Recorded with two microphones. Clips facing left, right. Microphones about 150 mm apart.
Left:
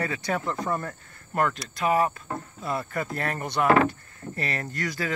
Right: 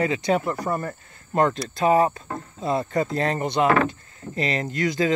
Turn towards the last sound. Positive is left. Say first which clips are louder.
# right 8 dB
turn(degrees=-20)  # may be behind; listen again after turning